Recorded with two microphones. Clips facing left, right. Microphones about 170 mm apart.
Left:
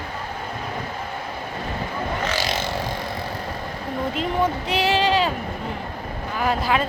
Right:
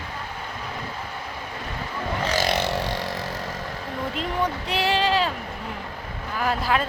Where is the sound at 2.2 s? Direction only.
35° right (ahead or behind).